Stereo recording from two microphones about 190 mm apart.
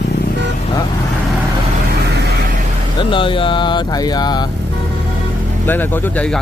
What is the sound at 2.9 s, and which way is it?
Speech, 25° left (ahead or behind).